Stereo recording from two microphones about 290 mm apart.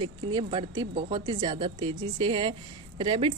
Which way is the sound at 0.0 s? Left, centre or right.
Centre.